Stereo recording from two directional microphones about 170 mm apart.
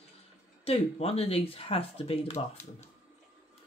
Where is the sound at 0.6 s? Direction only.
35° left (ahead or behind).